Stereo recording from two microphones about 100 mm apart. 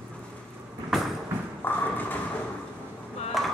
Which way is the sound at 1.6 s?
15° left (ahead or behind).